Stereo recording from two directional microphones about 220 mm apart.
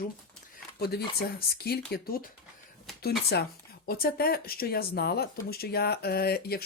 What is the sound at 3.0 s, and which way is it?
Speech, 45° left (ahead or behind).